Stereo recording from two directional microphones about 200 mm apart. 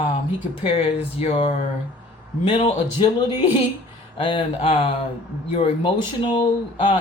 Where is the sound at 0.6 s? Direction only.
30° left (ahead or behind).